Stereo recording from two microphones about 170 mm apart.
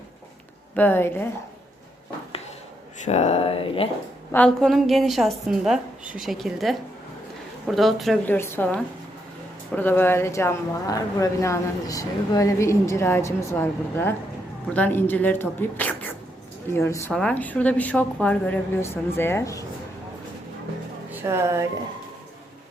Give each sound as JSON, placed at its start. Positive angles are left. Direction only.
{"t": 0.8, "sound": "speech", "side_deg": 10}
{"t": 3.0, "sound": "speech", "side_deg": 40}
{"t": 4.3, "sound": "a woman's voice", "side_deg": 5}
{"t": 8.3, "sound": "speech", "side_deg": 15}
{"t": 21.1, "sound": "speech", "side_deg": -15}